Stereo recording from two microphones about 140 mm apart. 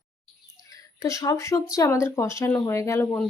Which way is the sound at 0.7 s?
25° left (ahead or behind).